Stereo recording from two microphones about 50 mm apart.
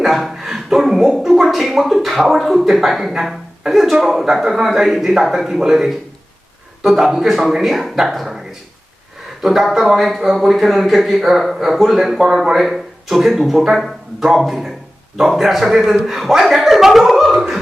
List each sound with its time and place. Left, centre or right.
0.0 s speech: centre
9.4 s speech: centre